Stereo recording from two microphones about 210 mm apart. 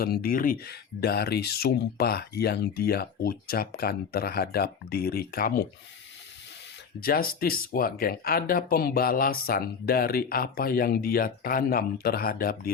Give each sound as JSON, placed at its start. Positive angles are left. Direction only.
{"t": 0.0, "sound": "speech", "side_deg": 45}
{"t": 7.0, "sound": "speech", "side_deg": 45}